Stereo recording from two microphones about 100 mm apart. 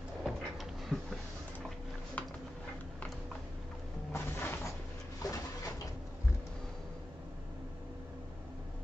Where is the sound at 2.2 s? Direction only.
15° left (ahead or behind).